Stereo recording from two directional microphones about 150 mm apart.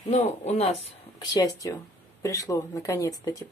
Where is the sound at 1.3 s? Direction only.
20° left (ahead or behind).